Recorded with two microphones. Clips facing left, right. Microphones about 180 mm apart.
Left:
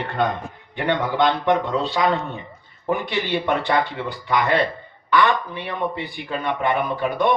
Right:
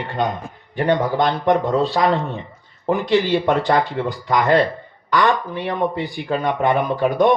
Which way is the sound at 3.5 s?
45° right (ahead or behind).